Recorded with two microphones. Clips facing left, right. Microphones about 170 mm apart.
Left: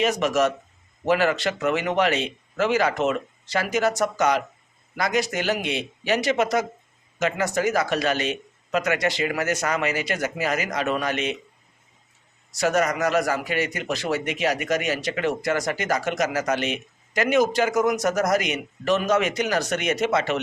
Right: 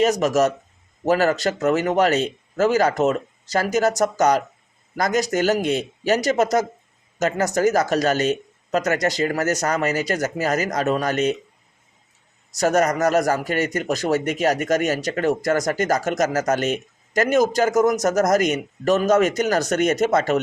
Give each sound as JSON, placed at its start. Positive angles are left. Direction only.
{"t": 0.0, "sound": "speech", "side_deg": -40}
{"t": 12.5, "sound": "a man's voice", "side_deg": -45}